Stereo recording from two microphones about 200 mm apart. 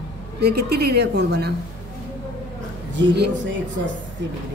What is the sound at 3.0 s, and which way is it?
Speech, 60° right (ahead or behind).